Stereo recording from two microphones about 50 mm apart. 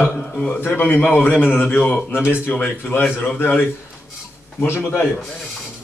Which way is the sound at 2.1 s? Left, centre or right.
Left.